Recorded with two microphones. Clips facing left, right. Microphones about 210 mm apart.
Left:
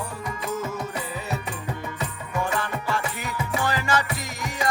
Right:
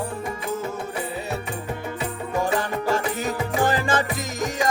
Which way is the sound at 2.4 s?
40° right (ahead or behind).